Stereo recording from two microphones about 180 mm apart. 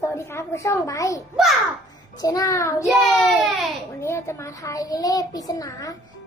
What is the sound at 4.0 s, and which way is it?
A child's voice, 15° left (ahead or behind).